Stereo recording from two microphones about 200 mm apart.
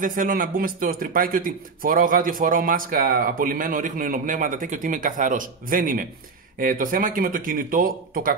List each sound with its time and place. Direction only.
0.0 s speech: 40° right (ahead or behind)